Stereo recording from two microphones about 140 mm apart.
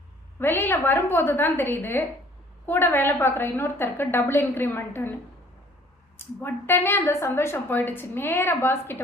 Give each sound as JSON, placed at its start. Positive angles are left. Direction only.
{"t": 0.3, "sound": "a woman's voice", "side_deg": 15}
{"t": 6.1, "sound": "a woman's voice", "side_deg": 15}